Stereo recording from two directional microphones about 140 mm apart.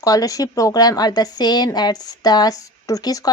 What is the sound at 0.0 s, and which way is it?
A woman's voice, 25° left (ahead or behind).